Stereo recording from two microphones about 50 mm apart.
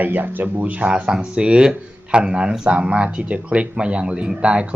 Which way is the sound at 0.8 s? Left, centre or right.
Centre.